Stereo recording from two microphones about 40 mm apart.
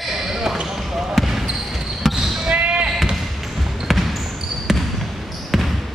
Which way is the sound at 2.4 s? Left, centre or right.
Right.